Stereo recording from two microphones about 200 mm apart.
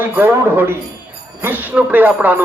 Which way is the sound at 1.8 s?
10° right (ahead or behind).